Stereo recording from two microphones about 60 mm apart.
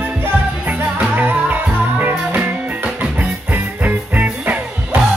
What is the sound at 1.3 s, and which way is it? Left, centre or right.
Music, right.